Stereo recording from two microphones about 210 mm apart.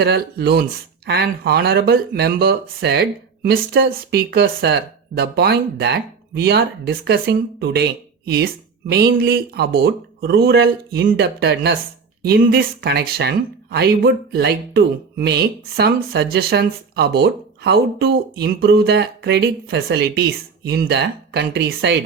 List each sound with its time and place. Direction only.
0.0 s speech: 50° right (ahead or behind)